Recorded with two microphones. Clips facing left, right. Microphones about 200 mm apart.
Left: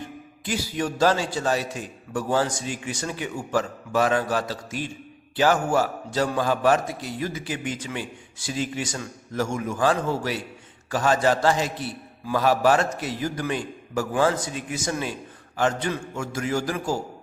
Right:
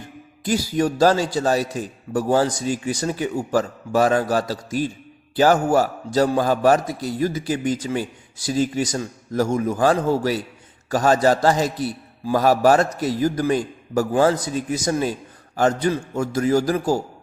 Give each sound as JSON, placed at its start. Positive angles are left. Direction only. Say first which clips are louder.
{"t": 0.4, "sound": "a man's voice", "louder": "right 7 dB", "side_deg": -40}